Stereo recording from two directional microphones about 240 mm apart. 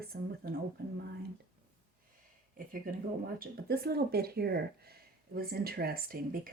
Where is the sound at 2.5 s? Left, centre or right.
Right.